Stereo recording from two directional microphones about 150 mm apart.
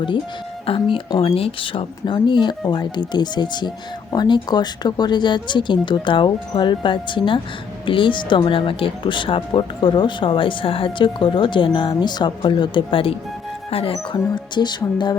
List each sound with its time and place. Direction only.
0.6 s speech: 35° left (ahead or behind)